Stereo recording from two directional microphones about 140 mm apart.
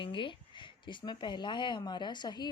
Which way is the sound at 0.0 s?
35° left (ahead or behind).